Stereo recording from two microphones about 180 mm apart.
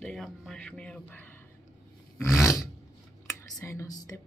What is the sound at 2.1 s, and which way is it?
Filing, 10° left (ahead or behind).